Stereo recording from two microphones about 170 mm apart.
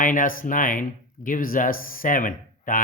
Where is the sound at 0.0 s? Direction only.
55° left (ahead or behind).